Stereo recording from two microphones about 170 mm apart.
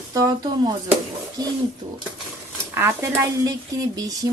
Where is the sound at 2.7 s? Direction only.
15° right (ahead or behind).